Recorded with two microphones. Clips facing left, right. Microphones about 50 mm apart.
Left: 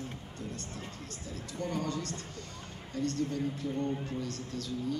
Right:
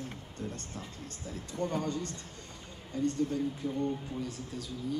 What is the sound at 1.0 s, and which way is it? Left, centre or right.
Speech, right.